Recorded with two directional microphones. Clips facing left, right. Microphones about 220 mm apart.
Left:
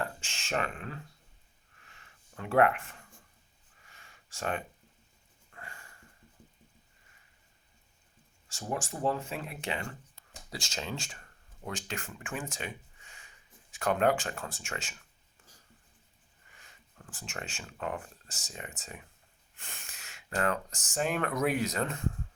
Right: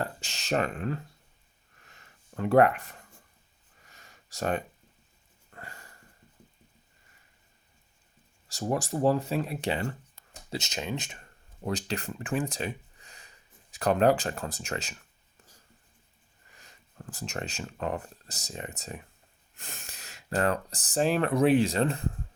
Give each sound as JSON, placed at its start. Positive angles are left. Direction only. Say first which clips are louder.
{"t": 0.0, "sound": "speech", "louder": "right 3 dB", "side_deg": -40}
{"t": 1.9, "sound": "a sound", "louder": "right 5 dB", "side_deg": -40}
{"t": 3.9, "sound": "a sound", "louder": "right 7 dB", "side_deg": -40}
{"t": 8.4, "sound": "speech", "louder": "right 6 dB", "side_deg": -40}
{"t": 10.5, "sound": "speech", "louder": "right 5 dB", "side_deg": -20}
{"t": 11.6, "sound": "speech", "louder": "right 7 dB", "side_deg": -35}
{"t": 17.1, "sound": "speech", "louder": "right 6 dB", "side_deg": -40}